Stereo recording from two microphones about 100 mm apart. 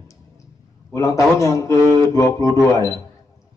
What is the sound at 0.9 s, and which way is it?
Speech, 35° left (ahead or behind).